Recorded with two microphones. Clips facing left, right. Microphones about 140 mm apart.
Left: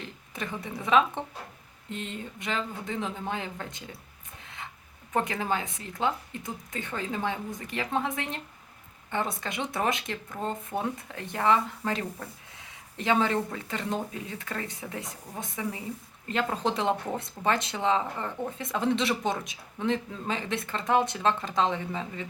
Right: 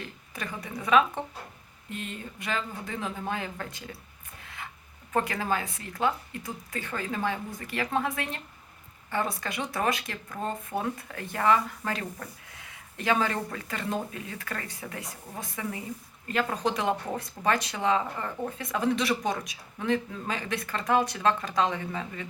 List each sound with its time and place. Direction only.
0.3 s speech: 20° left (ahead or behind)
5.1 s speech: 20° left (ahead or behind)
13.0 s speech: 20° left (ahead or behind)